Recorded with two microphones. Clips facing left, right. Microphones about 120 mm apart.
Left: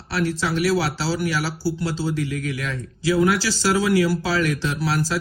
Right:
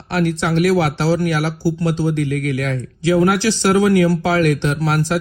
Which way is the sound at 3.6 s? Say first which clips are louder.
Right 5 dB; 55° right (ahead or behind).